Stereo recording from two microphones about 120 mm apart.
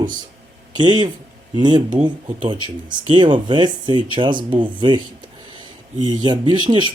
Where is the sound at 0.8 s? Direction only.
40° right (ahead or behind).